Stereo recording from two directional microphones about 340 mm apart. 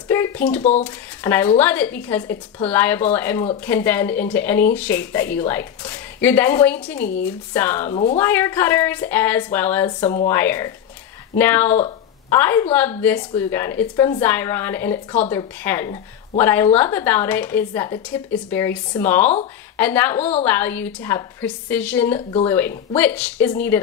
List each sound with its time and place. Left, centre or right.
0.6 s speech: centre
0.8 s a woman's voice: centre